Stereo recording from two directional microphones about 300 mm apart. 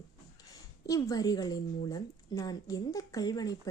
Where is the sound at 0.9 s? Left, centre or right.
Centre.